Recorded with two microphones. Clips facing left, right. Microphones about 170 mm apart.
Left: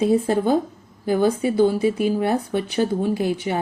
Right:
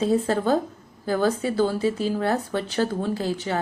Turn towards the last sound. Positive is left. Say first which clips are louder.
# left 4 dB
turn(degrees=15)  # may be behind; listen again after turning